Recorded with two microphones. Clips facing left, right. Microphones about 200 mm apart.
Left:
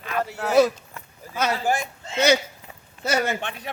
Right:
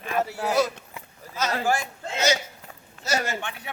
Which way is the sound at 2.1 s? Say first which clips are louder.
Left 5 dB; 60° left (ahead or behind).